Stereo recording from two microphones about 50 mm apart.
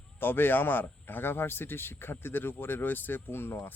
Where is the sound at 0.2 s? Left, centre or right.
Left.